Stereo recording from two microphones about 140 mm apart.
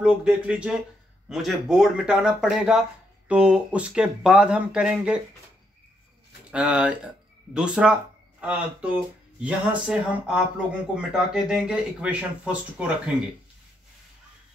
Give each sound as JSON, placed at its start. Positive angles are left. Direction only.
{"t": 0.0, "sound": "speech", "side_deg": -5}
{"t": 6.5, "sound": "speech", "side_deg": -10}